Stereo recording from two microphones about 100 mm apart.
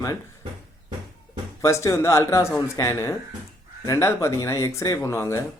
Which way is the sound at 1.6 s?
30° left (ahead or behind).